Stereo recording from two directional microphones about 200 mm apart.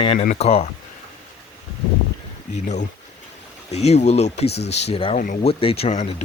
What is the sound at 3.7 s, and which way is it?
A man's voice, 35° left (ahead or behind).